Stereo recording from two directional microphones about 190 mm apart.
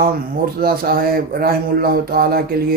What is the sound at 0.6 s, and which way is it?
Speech, 50° right (ahead or behind).